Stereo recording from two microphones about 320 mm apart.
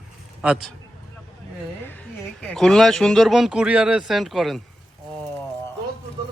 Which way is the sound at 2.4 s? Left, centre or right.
Centre.